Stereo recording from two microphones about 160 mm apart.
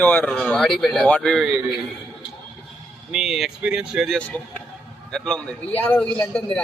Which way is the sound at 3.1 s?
5° right (ahead or behind).